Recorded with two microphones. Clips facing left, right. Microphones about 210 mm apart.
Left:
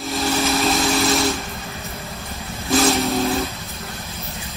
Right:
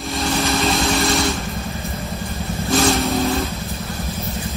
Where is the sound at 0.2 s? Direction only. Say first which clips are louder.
Even; centre (ahead or behind).